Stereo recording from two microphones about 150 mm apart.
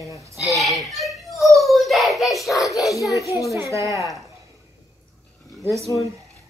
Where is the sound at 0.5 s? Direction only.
Centre (ahead or behind).